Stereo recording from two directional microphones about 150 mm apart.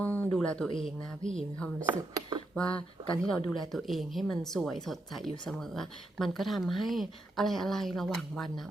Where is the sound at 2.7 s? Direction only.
35° left (ahead or behind).